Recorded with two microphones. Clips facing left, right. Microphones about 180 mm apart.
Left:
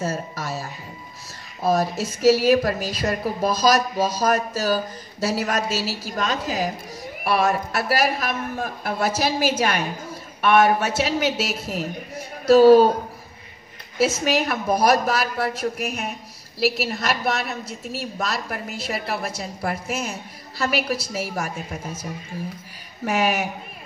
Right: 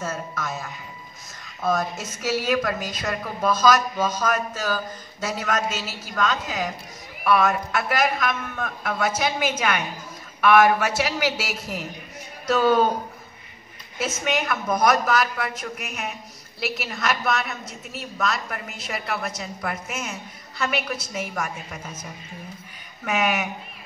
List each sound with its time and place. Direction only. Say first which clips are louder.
0.0 s music: left 3 dB; 35° left (ahead or behind)
1.6 s a man's voice: left 4 dB; 35° left (ahead or behind)
13.9 s speech: left 5 dB; 35° left (ahead or behind)
23.0 s speech: left 2 dB; 30° left (ahead or behind)